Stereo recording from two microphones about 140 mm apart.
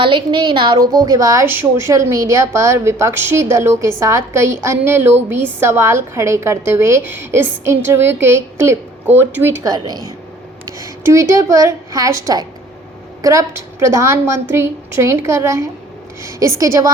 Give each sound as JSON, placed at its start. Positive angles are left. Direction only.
{"t": 0.0, "sound": "a woman's voice", "side_deg": -35}
{"t": 9.7, "sound": "a woman's voice", "side_deg": -30}